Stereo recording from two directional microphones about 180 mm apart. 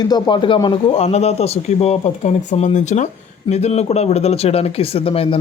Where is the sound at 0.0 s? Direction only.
25° left (ahead or behind).